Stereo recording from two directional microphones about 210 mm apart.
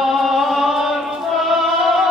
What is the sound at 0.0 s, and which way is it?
Music, centre (ahead or behind).